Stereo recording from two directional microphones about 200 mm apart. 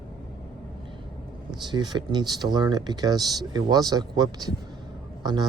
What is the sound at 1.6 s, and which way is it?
A man's voice, 20° right (ahead or behind).